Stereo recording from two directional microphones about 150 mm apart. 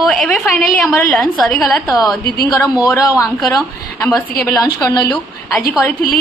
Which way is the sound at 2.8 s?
20° left (ahead or behind).